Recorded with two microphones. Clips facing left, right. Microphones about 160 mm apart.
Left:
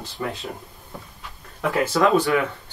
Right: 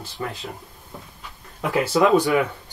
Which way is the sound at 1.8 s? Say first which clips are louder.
Right 1 dB; 15° right (ahead or behind).